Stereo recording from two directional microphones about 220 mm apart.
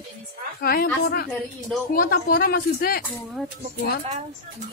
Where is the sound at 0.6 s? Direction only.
45° left (ahead or behind).